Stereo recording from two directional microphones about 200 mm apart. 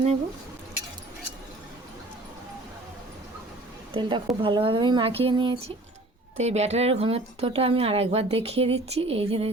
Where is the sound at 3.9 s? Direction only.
25° right (ahead or behind).